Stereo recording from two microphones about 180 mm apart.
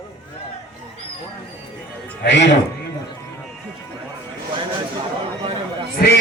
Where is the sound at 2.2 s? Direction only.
80° left.